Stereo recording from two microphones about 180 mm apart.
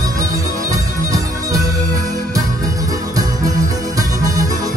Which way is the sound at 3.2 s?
20° right (ahead or behind).